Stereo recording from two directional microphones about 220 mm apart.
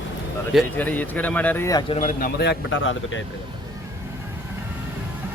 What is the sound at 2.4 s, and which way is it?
Speech, 55° left (ahead or behind).